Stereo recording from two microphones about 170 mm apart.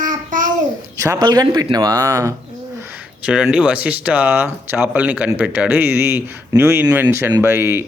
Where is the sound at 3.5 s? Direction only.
10° right (ahead or behind).